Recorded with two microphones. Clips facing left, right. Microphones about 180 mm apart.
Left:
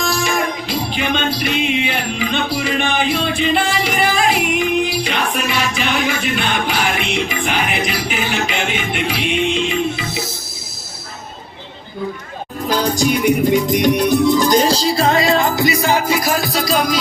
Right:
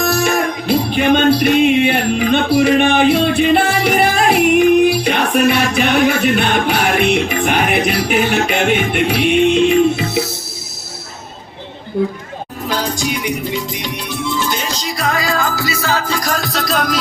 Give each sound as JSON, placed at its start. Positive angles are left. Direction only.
{"t": 0.0, "sound": "music", "side_deg": -55}
{"t": 12.6, "sound": "music", "side_deg": 45}